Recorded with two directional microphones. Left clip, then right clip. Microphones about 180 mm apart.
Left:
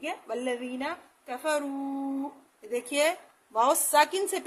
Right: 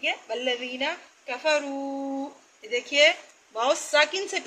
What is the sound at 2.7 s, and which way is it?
A woman's voice, 90° left.